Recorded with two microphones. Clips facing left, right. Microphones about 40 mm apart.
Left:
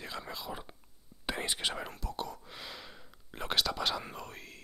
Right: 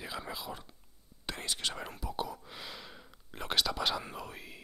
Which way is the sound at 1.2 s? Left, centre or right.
Centre.